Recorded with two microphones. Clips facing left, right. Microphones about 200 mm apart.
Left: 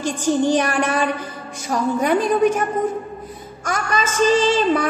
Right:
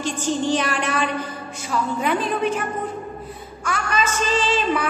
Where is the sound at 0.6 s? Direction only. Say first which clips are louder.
Left 4 dB; 45° left (ahead or behind).